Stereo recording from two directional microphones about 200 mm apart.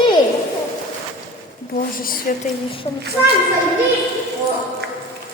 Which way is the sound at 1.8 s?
45° left (ahead or behind).